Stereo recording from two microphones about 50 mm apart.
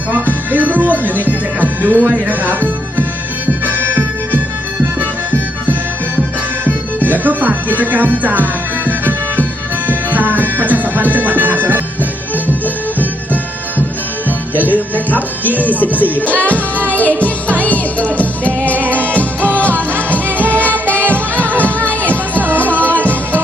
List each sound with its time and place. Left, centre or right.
0.1 s music: right
3.7 s music: right
7.0 s music: right
14.3 s music: right
14.7 s speech: left
16.8 s music: left
22.1 s music: right
23.0 s music: left